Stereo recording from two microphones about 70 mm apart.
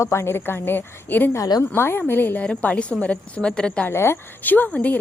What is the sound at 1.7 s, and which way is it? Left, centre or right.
Speech, left.